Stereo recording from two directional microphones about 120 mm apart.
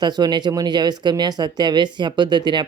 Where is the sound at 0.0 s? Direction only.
35° right (ahead or behind).